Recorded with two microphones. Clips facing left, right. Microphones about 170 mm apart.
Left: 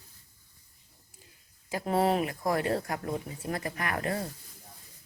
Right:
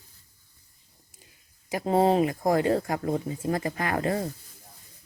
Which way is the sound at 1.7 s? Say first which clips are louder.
Right 5 dB; 20° right (ahead or behind).